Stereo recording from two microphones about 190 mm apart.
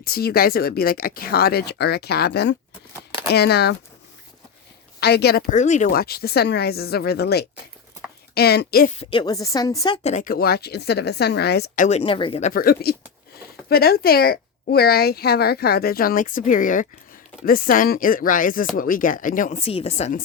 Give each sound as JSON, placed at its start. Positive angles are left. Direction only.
{"t": 0.0, "sound": "speech", "side_deg": 55}
{"t": 4.9, "sound": "a woman's voice", "side_deg": 60}
{"t": 5.5, "sound": "speech", "side_deg": 40}
{"t": 9.0, "sound": "a woman's voice", "side_deg": 25}
{"t": 11.9, "sound": "a woman's voice", "side_deg": 30}